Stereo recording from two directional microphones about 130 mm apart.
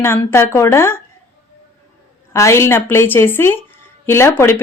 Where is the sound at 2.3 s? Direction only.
20° left (ahead or behind).